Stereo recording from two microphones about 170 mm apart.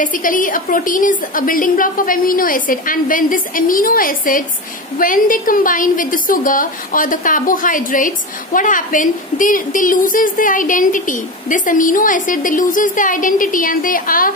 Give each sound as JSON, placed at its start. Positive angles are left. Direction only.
{"t": 0.0, "sound": "a woman's voice", "side_deg": 50}